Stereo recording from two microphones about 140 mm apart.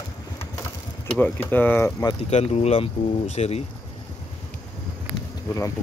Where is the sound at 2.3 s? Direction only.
50° left (ahead or behind).